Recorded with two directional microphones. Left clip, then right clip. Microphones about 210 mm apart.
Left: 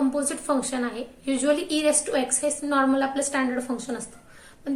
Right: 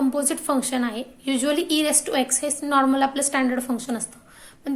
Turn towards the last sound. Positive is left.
turn(degrees=-40)  # may be behind; listen again after turning